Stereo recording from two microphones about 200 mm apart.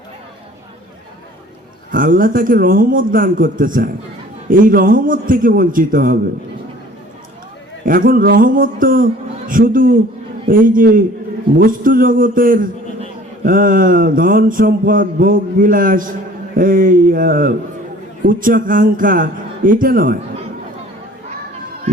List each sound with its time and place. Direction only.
1.9 s mantra: 45° right (ahead or behind)
7.9 s mantra: 45° right (ahead or behind)